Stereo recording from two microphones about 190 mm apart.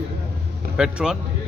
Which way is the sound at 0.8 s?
5° right (ahead or behind).